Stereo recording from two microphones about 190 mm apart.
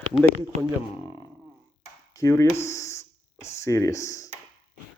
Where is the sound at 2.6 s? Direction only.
15° left (ahead or behind).